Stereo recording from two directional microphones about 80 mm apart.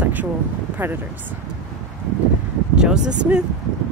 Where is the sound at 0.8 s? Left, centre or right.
Right.